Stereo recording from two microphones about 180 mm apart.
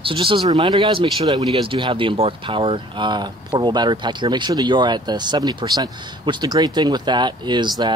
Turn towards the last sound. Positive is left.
turn(degrees=-25)  # may be behind; listen again after turning